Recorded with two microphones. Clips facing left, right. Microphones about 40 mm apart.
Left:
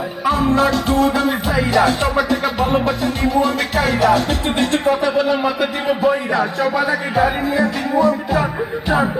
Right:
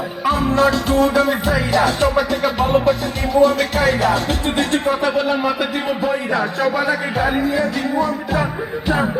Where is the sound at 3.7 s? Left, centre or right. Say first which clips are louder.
Left 1 dB; right.